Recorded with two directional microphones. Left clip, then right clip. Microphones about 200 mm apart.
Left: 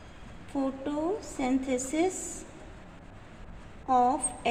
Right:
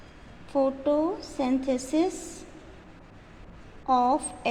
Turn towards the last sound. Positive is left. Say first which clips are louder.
# right 1 dB
turn(degrees=-15)  # may be behind; listen again after turning